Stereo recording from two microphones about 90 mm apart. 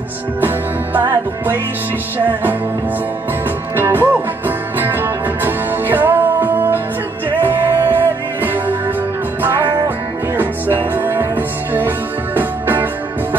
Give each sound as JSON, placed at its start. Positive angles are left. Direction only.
{"t": 1.1, "sound": "music", "side_deg": -25}
{"t": 3.7, "sound": "music", "side_deg": -25}